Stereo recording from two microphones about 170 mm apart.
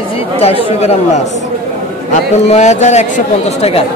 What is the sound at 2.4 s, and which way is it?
Speech, 40° left (ahead or behind).